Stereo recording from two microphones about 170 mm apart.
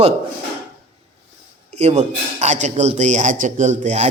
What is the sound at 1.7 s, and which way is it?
A man's voice, 40° right (ahead or behind).